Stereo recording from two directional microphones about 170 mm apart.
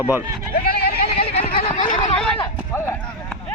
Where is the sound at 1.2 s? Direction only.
35° left (ahead or behind).